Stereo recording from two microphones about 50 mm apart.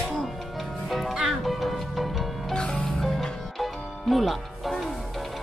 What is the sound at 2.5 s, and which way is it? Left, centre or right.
Music, centre.